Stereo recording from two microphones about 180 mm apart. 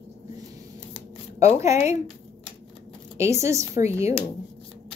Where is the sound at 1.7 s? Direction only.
40° left (ahead or behind).